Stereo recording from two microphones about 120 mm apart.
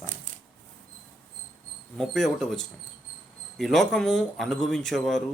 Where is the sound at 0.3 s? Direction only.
90° right.